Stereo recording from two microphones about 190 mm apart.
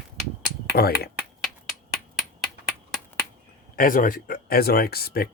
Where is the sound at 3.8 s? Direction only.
45° left (ahead or behind).